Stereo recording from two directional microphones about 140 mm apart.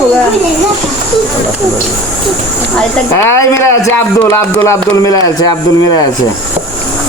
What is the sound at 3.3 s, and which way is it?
Speech, 20° left (ahead or behind).